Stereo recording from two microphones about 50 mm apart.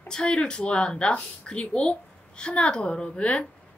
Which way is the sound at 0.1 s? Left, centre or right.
Centre.